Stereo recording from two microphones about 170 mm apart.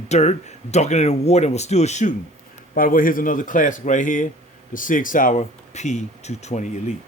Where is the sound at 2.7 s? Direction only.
55° left (ahead or behind).